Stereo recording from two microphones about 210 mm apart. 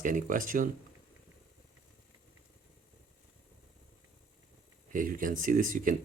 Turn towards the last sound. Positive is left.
turn(degrees=-40)  # may be behind; listen again after turning